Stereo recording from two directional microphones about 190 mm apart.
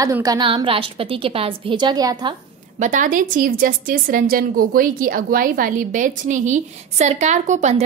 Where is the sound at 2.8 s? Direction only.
40° right (ahead or behind).